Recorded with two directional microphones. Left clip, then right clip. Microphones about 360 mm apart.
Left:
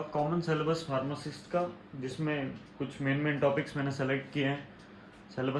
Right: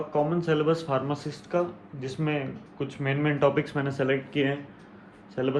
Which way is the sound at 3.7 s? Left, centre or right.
Centre.